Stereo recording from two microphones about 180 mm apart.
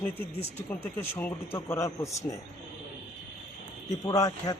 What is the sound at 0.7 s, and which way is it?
A man's voice, 15° left (ahead or behind).